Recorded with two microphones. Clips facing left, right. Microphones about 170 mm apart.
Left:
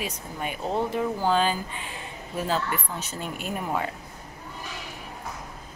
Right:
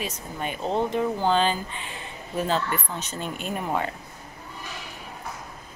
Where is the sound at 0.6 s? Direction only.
20° right (ahead or behind).